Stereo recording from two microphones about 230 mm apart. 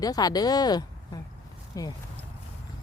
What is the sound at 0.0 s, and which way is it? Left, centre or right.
Speech, centre.